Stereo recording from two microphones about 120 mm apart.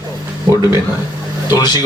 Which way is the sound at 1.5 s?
35° left (ahead or behind).